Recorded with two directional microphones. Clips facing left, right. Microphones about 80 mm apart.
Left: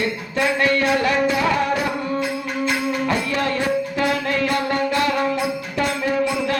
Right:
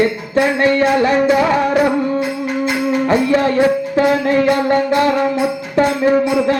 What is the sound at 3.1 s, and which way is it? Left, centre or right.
Music, right.